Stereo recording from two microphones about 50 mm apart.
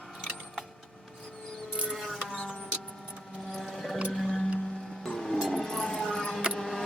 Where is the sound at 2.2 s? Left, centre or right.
Centre.